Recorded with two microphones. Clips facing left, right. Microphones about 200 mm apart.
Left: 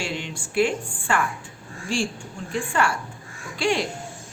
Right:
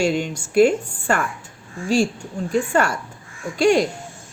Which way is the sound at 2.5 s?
40° right (ahead or behind).